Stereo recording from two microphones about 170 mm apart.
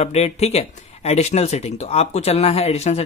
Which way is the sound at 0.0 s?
40° left (ahead or behind).